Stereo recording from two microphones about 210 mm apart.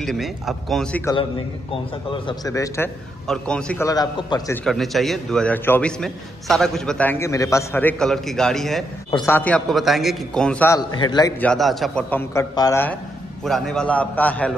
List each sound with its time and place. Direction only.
0.0 s a man's voice: centre (ahead or behind)
1.0 s a man's voice: 20° left (ahead or behind)
4.6 s a man's voice: centre (ahead or behind)
9.1 s a man's voice: 15° left (ahead or behind)
10.8 s a man's voice: 20° left (ahead or behind)
11.4 s a man's voice: centre (ahead or behind)
13.4 s a man's voice: centre (ahead or behind)